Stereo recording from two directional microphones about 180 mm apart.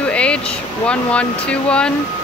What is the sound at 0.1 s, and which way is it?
Speech, 5° left (ahead or behind).